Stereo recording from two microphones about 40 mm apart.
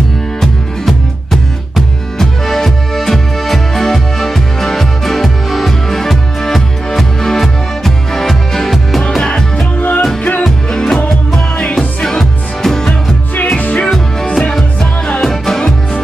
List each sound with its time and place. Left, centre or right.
0.4 s music: centre
9.2 s music: centre
9.8 s music: left
10.4 s music: centre
12.0 s music: centre
13.6 s music: left
14.3 s music: centre